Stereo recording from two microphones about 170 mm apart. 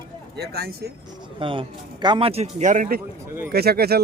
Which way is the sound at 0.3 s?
70° right (ahead or behind).